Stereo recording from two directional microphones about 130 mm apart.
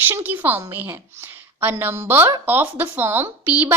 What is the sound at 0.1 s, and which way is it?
A woman's voice, 15° right (ahead or behind).